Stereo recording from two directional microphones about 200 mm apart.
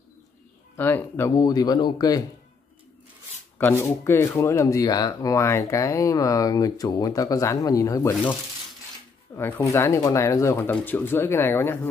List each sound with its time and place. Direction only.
0.7 s speech: 10° left (ahead or behind)
3.5 s speech: 10° left (ahead or behind)